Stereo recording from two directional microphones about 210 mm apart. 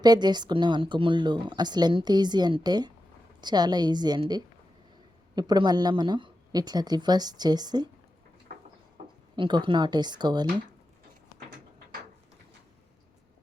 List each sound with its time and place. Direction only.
0.0 s speech: 20° right (ahead or behind)
9.3 s speech: 20° right (ahead or behind)